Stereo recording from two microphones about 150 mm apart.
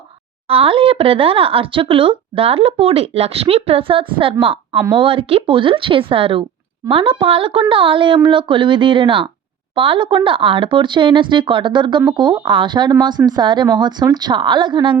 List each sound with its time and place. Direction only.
0.4 s speech: 40° right (ahead or behind)